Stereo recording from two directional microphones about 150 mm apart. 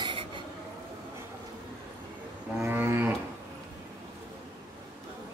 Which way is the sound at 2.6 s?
15° right (ahead or behind).